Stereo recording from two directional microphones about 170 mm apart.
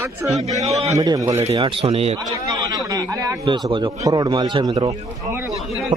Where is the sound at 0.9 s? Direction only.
20° right (ahead or behind).